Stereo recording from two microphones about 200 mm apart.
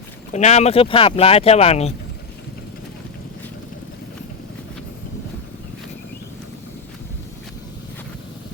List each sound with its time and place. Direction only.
0.3 s speech: 35° left (ahead or behind)